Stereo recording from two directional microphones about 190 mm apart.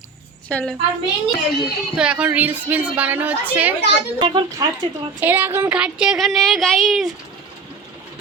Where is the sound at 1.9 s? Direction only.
5° right (ahead or behind).